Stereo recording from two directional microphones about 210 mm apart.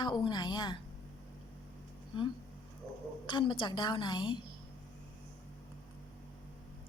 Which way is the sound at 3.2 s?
25° left (ahead or behind).